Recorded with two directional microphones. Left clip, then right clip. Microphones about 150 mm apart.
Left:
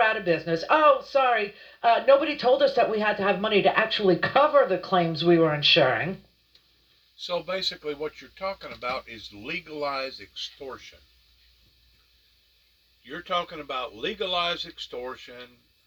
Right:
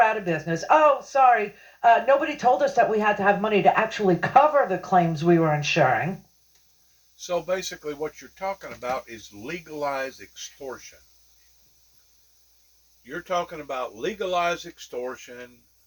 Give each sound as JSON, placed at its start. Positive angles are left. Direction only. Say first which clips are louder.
{"t": 0.0, "sound": "speech", "louder": "right 1 dB", "side_deg": 35}
{"t": 7.3, "sound": "speech", "louder": "right 2 dB", "side_deg": -10}
{"t": 9.0, "sound": "speech", "louder": "even", "side_deg": -35}
{"t": 13.1, "sound": "speech", "louder": "right 1 dB", "side_deg": -35}
{"t": 14.7, "sound": "speech", "louder": "right 2 dB", "side_deg": -20}